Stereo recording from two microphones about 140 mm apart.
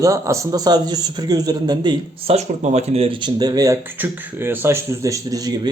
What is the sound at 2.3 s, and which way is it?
Speech, 55° right (ahead or behind).